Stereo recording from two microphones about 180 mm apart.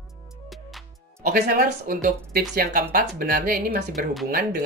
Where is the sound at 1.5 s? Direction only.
50° right (ahead or behind).